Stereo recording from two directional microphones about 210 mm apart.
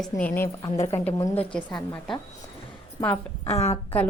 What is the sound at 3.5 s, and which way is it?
Speech, 30° left (ahead or behind).